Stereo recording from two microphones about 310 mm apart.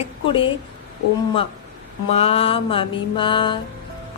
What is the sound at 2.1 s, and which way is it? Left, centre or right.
Mantra, centre.